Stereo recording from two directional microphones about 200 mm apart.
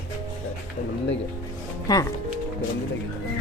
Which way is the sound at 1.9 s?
20° left (ahead or behind).